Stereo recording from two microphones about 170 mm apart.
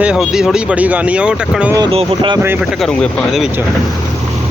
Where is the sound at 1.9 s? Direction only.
30° right (ahead or behind).